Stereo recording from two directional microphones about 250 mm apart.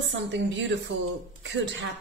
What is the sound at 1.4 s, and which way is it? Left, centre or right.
Speech, right.